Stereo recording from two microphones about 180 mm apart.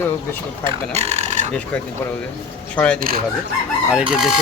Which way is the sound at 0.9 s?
40° right (ahead or behind).